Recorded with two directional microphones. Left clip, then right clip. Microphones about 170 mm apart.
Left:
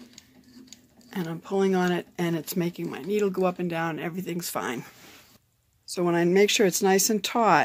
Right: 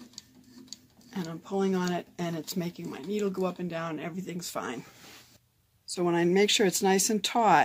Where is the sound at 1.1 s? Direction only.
50° left (ahead or behind).